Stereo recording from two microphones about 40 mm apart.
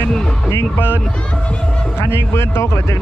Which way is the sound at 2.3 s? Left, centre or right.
Left.